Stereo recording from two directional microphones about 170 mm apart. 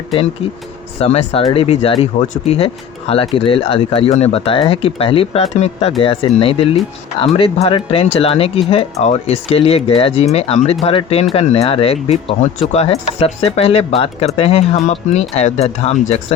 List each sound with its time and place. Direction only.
0.9 s speech: 35° left (ahead or behind)